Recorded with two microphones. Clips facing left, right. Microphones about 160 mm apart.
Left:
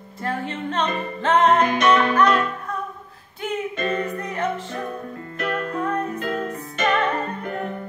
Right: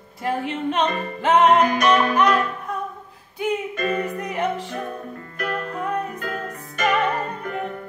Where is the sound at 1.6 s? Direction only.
25° left (ahead or behind).